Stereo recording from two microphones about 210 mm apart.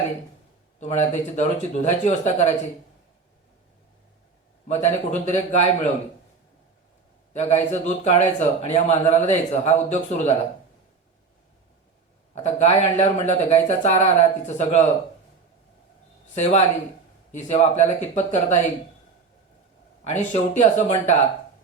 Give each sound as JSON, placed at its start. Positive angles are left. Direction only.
{"t": 0.8, "sound": "speech", "side_deg": 35}
{"t": 4.7, "sound": "speech", "side_deg": 35}
{"t": 7.3, "sound": "speech", "side_deg": 30}
{"t": 12.3, "sound": "speech", "side_deg": 35}
{"t": 16.3, "sound": "speech", "side_deg": 35}
{"t": 20.1, "sound": "speech", "side_deg": 35}